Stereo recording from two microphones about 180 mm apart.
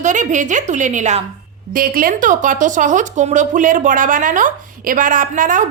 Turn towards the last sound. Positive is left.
turn(degrees=-45)  # may be behind; listen again after turning